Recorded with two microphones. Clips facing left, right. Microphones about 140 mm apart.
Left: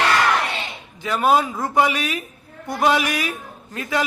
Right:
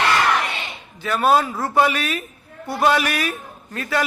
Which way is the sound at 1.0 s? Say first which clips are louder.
Even; 20° left (ahead or behind).